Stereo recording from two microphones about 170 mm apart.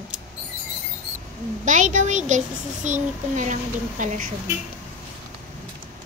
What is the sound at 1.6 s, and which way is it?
A woman's voice, 45° right (ahead or behind).